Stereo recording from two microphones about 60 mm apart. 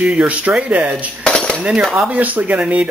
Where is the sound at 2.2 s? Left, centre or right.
Right.